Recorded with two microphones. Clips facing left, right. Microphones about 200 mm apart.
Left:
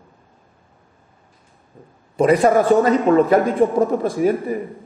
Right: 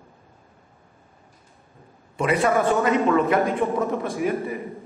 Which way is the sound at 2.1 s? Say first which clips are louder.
Left 7 dB; 35° left (ahead or behind).